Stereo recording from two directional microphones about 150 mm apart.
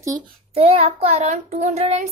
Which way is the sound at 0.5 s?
45° right (ahead or behind).